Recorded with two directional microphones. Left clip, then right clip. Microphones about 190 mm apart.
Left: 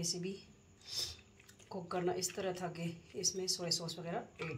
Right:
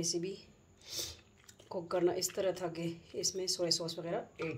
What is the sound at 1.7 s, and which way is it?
A woman's voice, 65° right (ahead or behind).